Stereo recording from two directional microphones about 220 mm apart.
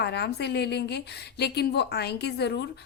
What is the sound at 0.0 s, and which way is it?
A woman's voice, 50° left (ahead or behind).